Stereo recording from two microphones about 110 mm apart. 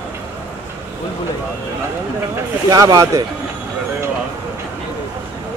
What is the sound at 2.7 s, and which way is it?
Speech, 35° right (ahead or behind).